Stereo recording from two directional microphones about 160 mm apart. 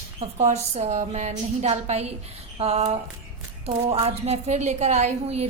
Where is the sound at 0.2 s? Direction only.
40° right (ahead or behind).